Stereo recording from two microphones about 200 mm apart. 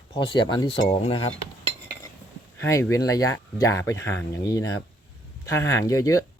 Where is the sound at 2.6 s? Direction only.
15° left (ahead or behind).